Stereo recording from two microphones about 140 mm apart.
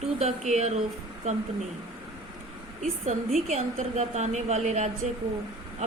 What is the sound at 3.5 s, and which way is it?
A woman's voice, 50° right (ahead or behind).